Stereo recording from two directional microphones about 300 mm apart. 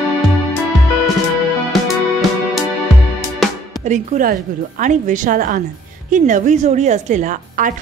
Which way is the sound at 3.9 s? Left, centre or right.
Right.